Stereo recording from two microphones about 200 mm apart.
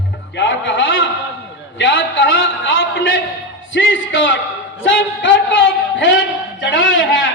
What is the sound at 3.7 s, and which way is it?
Speech, 70° left (ahead or behind).